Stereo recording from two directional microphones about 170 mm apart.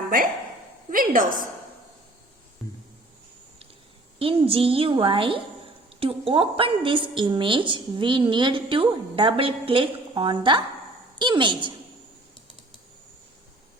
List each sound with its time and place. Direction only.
0.9 s a woman's voice: 55° right (ahead or behind)
4.2 s a woman's voice: 35° right (ahead or behind)